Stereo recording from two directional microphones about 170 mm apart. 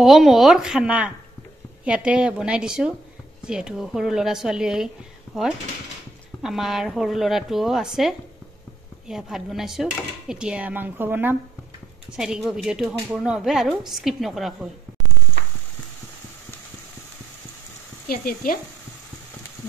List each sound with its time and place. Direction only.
0.0 s speech: centre (ahead or behind)
18.0 s speech: 60° left (ahead or behind)